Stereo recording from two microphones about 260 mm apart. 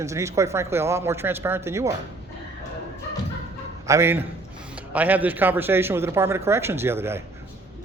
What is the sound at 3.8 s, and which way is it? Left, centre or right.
Speech, centre.